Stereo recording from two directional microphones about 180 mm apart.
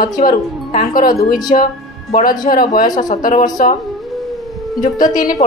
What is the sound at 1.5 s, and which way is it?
Speech, 40° left (ahead or behind).